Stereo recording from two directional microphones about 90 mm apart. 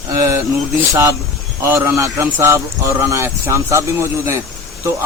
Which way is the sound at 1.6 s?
25° right (ahead or behind).